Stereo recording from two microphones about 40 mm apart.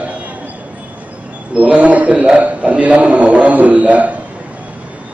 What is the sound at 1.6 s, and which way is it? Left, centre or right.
A man's voice, right.